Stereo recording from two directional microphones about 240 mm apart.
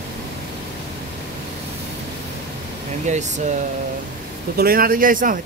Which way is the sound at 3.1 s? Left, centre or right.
Right.